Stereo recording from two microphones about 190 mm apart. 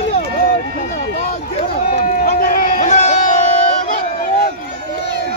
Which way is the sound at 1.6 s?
45° left (ahead or behind).